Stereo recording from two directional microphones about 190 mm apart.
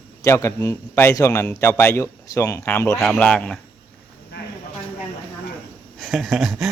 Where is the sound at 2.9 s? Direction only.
Centre (ahead or behind).